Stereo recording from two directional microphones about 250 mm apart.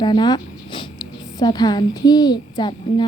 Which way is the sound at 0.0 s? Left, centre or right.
Centre.